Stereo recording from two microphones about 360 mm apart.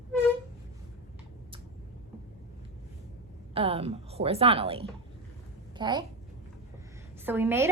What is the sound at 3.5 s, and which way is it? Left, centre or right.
A woman's voice, centre.